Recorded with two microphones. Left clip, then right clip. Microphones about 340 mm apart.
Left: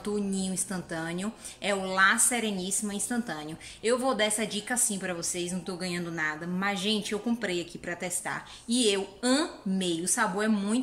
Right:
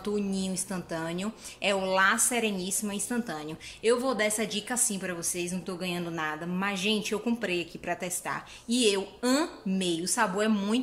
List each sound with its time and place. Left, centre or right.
0.0 s a woman's voice: centre